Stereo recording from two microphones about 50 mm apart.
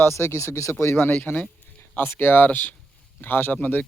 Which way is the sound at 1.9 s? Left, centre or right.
Left.